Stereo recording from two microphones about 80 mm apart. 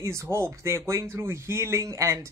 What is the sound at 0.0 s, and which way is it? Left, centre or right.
Speech, right.